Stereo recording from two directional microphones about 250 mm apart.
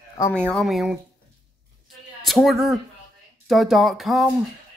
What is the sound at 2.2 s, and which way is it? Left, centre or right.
Speech, centre.